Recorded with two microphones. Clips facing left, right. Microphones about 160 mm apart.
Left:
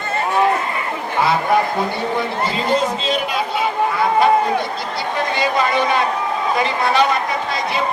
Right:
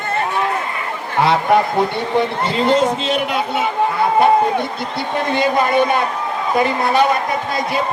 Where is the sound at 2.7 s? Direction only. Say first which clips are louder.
Right 3 dB; 65° right (ahead or behind).